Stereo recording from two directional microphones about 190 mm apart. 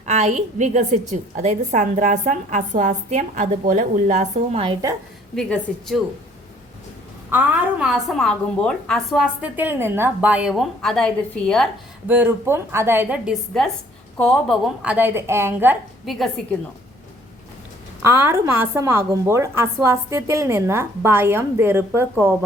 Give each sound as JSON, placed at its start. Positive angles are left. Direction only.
{"t": 0.0, "sound": "a woman's voice", "side_deg": -35}
{"t": 5.3, "sound": "a woman's voice", "side_deg": 0}
{"t": 7.3, "sound": "a woman's voice", "side_deg": -10}
{"t": 12.0, "sound": "a woman's voice", "side_deg": -10}
{"t": 16.0, "sound": "a woman's voice", "side_deg": 0}
{"t": 18.0, "sound": "a woman's voice", "side_deg": -15}